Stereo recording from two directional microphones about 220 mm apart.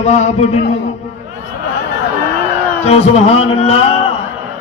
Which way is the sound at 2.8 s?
30° left (ahead or behind).